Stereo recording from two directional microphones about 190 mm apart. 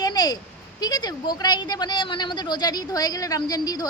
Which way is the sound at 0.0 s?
20° left (ahead or behind).